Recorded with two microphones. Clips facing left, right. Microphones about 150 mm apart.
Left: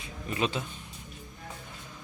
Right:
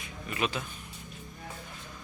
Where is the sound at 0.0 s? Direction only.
30° left (ahead or behind).